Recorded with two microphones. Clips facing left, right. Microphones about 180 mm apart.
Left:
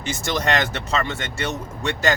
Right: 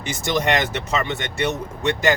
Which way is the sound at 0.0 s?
15° right (ahead or behind).